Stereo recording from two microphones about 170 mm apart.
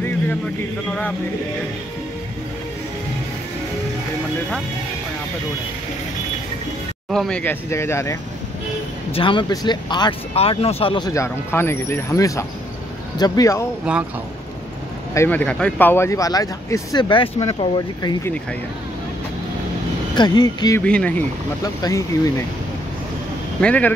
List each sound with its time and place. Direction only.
7.1 s speech: 5° left (ahead or behind)
9.1 s speech: 30° left (ahead or behind)
13.9 s speech: 10° right (ahead or behind)
15.1 s speech: 10° left (ahead or behind); by 18.1 s 30° left (ahead or behind)
20.2 s speech: 25° left (ahead or behind)
20.8 s speech: 5° left (ahead or behind)
21.8 s speech: 20° left (ahead or behind)
23.6 s speech: 10° left (ahead or behind)